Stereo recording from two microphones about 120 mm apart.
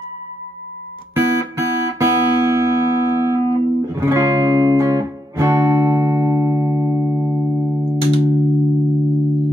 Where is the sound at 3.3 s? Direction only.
30° right (ahead or behind).